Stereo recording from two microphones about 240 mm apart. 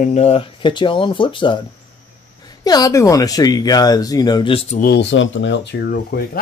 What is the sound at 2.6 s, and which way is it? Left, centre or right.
Speech, centre.